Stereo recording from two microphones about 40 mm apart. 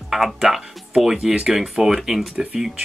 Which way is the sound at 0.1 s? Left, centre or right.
Centre.